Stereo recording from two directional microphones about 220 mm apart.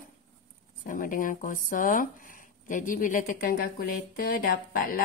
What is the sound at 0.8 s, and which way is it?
A woman's voice, 40° left (ahead or behind).